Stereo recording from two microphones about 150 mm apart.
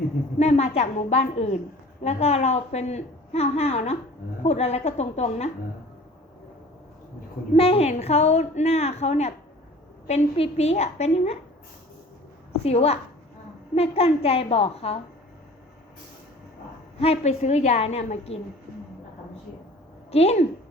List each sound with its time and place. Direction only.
0.3 s a woman's voice: 45° left (ahead or behind)
7.5 s a woman's voice: 40° left (ahead or behind)
12.6 s a woman's voice: 45° left (ahead or behind)
17.0 s a woman's voice: 45° left (ahead or behind)
20.1 s a woman's voice: 45° left (ahead or behind)